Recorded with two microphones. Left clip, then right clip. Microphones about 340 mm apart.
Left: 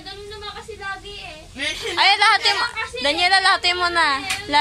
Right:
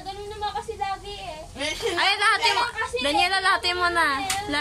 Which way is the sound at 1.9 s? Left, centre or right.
Centre.